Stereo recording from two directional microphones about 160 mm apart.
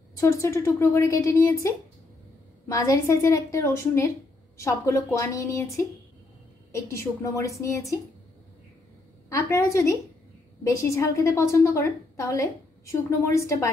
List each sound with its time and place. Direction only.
0.1 s a woman's voice: 20° left (ahead or behind)
2.7 s a woman's voice: 20° left (ahead or behind)
6.7 s a woman's voice: 20° left (ahead or behind)
9.3 s a woman's voice: 20° left (ahead or behind)